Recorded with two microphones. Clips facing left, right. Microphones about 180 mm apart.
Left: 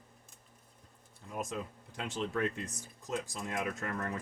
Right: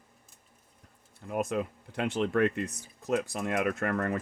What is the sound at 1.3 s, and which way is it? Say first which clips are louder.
Speech: right 8 dB; 65° right (ahead or behind).